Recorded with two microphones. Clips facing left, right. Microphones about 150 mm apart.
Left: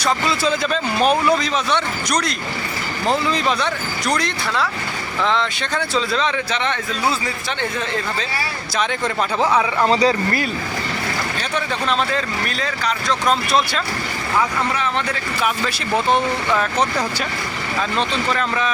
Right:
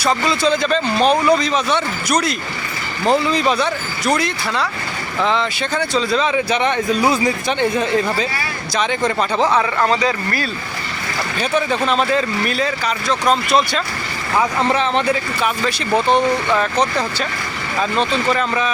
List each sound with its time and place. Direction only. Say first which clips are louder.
0.0 s speech: right 2 dB; 5° left (ahead or behind); by 8.3 s 15° right (ahead or behind)
8.7 s speech: right 3 dB; centre (ahead or behind)
9.9 s speech: left 2 dB; 30° left (ahead or behind)
11.3 s speech: right 5 dB; 5° right (ahead or behind)
14.6 s speech: right 5 dB; 25° right (ahead or behind)
15.4 s speech: right 2 dB; centre (ahead or behind)
17.9 s speech: right 4 dB; centre (ahead or behind)